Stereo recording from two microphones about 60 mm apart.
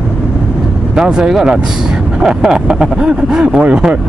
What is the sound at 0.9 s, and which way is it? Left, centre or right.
Speech, centre.